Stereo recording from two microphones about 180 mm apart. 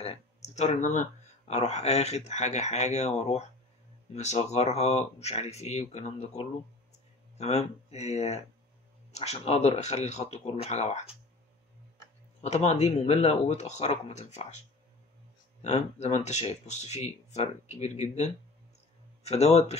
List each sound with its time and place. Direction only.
0.0 s a sound: 35° left (ahead or behind)
1.5 s speech: 35° left (ahead or behind)
12.4 s speech: 35° left (ahead or behind)
15.6 s speech: 40° left (ahead or behind)